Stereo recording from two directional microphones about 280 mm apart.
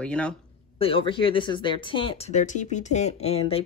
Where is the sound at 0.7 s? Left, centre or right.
Centre.